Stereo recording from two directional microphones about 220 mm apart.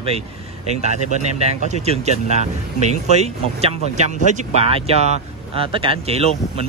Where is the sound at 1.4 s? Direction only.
30° right (ahead or behind).